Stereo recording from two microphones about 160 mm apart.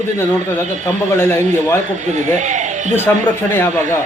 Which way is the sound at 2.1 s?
50° right (ahead or behind).